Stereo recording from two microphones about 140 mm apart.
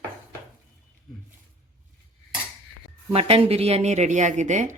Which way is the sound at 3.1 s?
40° right (ahead or behind).